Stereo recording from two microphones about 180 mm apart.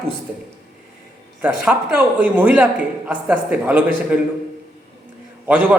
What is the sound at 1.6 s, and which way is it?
Speech, 10° right (ahead or behind).